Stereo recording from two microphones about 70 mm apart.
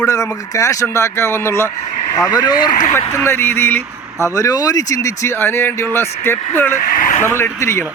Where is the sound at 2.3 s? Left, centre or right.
Left.